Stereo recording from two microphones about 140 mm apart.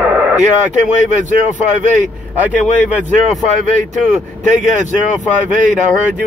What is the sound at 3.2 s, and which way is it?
Speech, 60° right (ahead or behind).